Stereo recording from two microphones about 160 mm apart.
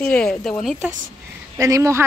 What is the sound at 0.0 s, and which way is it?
Speech, 5° left (ahead or behind).